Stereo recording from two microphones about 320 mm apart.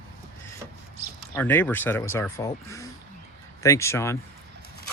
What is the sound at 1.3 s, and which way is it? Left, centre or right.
Speech, centre.